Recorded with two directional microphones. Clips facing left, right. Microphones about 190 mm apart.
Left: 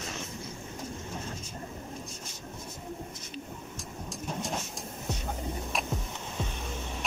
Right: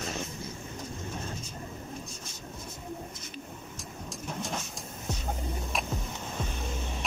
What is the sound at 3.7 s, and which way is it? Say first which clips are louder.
Vehicle: left 1 dB; centre (ahead or behind).